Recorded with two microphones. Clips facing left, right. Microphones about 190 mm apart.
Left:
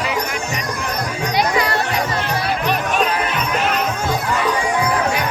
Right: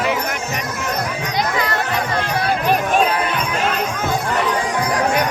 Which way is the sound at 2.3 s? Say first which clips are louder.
Right 3 dB; 50° right (ahead or behind).